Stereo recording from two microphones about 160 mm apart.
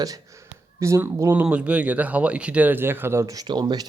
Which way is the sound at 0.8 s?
20° right (ahead or behind).